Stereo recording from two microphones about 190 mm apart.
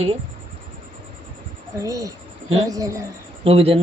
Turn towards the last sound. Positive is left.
turn(degrees=-30)  # may be behind; listen again after turning